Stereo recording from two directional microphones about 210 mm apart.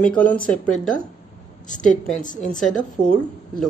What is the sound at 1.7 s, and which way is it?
Speech, 35° left (ahead or behind).